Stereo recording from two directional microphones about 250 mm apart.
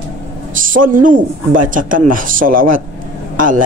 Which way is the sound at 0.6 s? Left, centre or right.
Right.